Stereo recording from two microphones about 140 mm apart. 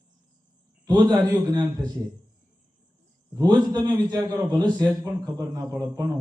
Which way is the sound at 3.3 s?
30° right (ahead or behind).